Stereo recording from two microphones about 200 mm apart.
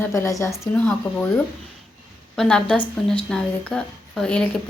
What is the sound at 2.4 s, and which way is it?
A woman's voice, 5° left (ahead or behind).